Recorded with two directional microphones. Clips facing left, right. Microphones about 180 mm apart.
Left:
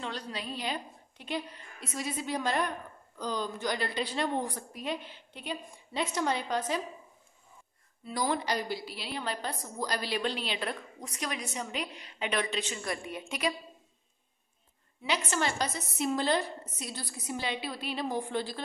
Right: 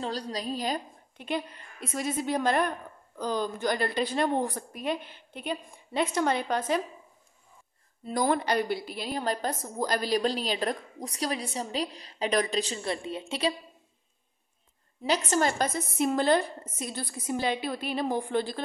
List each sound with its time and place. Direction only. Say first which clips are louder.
0.0 s a woman's voice: right 5 dB; 35° right (ahead or behind); by 6.8 s 55° right (ahead or behind)
8.0 s a woman's voice: right 5 dB; 50° right (ahead or behind); by 13.6 s 30° right (ahead or behind)
15.0 s a woman's voice: right 5 dB; 40° right (ahead or behind)